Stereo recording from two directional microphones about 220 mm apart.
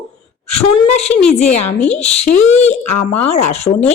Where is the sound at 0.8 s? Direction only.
30° left (ahead or behind).